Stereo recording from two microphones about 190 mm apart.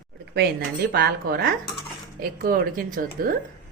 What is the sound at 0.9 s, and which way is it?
Speech, 55° right (ahead or behind).